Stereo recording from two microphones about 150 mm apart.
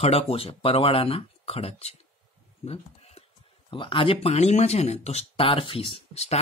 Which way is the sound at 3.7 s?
35° left (ahead or behind).